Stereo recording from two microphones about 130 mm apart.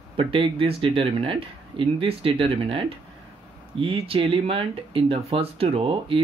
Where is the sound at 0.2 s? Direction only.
45° right (ahead or behind).